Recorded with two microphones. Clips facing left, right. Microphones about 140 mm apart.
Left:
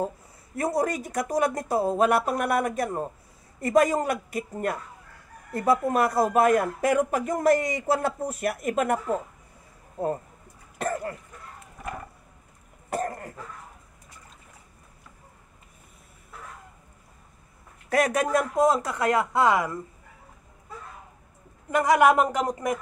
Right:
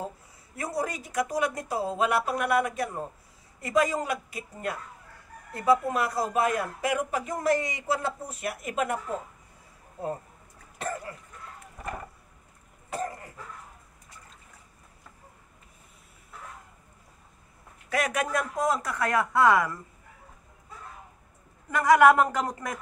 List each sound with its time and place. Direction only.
0.6 s a man's voice: 50° left (ahead or behind)
10.8 s a sound: 50° left (ahead or behind)
12.9 s cough: 50° left (ahead or behind)
17.8 s speech: 40° left (ahead or behind); by 19.8 s 20° left (ahead or behind)
21.6 s speech: 20° left (ahead or behind)